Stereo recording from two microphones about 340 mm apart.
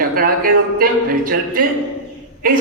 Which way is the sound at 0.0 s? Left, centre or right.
Right.